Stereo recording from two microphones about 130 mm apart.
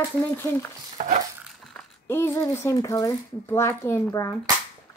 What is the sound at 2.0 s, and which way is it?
Speech, 20° left (ahead or behind).